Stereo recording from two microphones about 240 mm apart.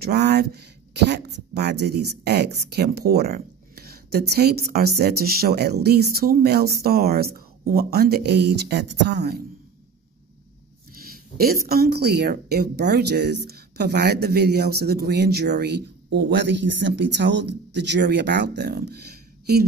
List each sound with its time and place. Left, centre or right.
0.0 s speech: right
10.9 s speech: right